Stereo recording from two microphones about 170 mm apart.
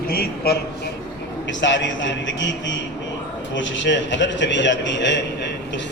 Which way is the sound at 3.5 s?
90° left.